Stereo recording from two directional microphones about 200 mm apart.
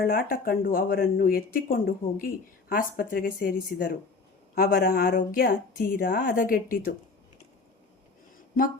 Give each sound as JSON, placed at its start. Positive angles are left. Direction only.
{"t": 0.0, "sound": "speech", "side_deg": 45}